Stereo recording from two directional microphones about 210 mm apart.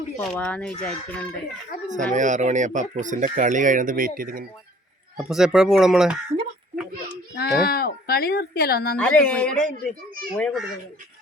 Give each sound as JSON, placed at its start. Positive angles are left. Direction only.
{"t": 0.2, "sound": "speech", "side_deg": 5}
{"t": 1.9, "sound": "speech", "side_deg": -35}
{"t": 5.1, "sound": "speech", "side_deg": 0}
{"t": 7.3, "sound": "speech", "side_deg": 50}
{"t": 9.0, "sound": "speech", "side_deg": 5}